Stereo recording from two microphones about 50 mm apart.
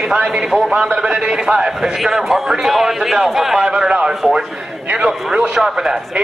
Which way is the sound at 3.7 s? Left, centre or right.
Centre.